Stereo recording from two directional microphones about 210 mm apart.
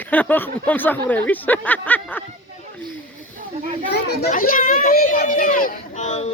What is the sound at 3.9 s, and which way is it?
A child's voice, 50° left (ahead or behind).